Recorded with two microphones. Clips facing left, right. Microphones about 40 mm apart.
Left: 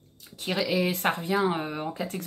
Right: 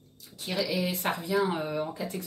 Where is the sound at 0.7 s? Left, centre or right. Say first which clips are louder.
Left 6 dB; left.